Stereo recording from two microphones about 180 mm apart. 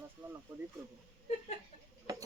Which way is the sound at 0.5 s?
10° right (ahead or behind).